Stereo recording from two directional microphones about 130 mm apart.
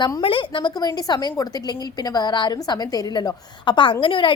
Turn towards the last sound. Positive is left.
turn(degrees=40)  # may be behind; listen again after turning